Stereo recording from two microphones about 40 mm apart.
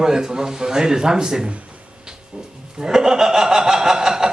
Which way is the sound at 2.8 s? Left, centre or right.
Centre.